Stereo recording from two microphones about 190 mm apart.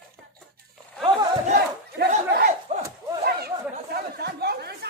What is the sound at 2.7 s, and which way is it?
Battle cry, 35° right (ahead or behind).